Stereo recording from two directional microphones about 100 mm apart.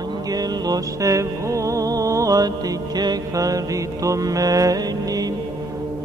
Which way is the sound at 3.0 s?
40° right (ahead or behind).